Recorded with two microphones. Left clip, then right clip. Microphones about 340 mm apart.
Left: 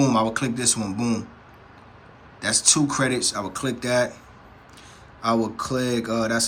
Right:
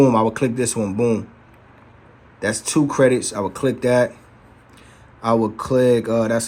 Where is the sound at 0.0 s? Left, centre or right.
Centre.